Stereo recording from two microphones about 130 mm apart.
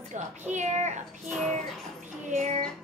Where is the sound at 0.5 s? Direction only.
65° right (ahead or behind).